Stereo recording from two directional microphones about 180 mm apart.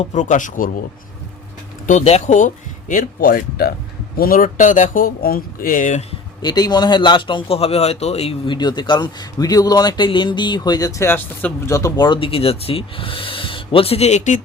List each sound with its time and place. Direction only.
0.0 s speech: 45° left (ahead or behind)
1.9 s speech: 40° left (ahead or behind)
2.9 s speech: 55° left (ahead or behind)
6.4 s speech: 25° left (ahead or behind); by 14.4 s 40° left (ahead or behind)